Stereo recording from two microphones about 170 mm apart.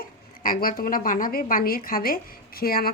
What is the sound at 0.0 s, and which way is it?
A woman's voice, 55° left (ahead or behind).